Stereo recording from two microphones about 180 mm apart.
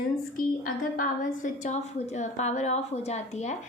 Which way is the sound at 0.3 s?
50° left (ahead or behind).